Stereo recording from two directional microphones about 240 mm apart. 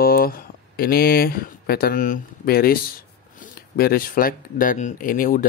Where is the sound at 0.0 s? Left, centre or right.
Left.